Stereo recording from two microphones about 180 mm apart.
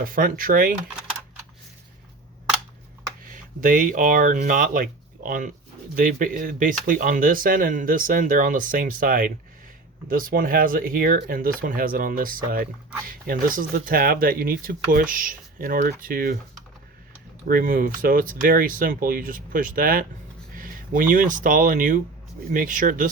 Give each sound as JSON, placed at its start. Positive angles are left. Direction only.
{"t": 0.0, "sound": "speech", "side_deg": -50}
{"t": 3.2, "sound": "speech", "side_deg": -50}
{"t": 17.5, "sound": "speech", "side_deg": -50}